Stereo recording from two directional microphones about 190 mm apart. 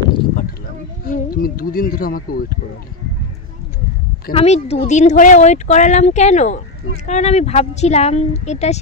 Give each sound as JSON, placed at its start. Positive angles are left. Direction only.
{"t": 1.0, "sound": "speech", "side_deg": 50}
{"t": 4.3, "sound": "speech", "side_deg": 30}